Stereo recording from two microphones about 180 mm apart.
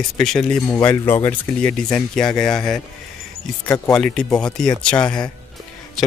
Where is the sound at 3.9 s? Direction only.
5° left (ahead or behind).